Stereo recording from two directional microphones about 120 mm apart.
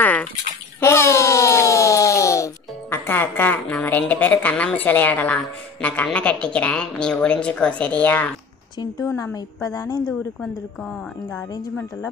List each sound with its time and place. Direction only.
0.0 s bathtub: 15° left (ahead or behind)
0.7 s a sound: 25° left (ahead or behind)
4.0 s a woman's voice: 15° left (ahead or behind)
9.0 s a woman's voice: 25° left (ahead or behind)
10.4 s speech: 5° left (ahead or behind)